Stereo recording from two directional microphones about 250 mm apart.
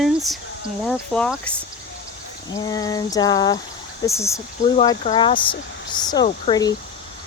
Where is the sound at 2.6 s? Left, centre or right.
Centre.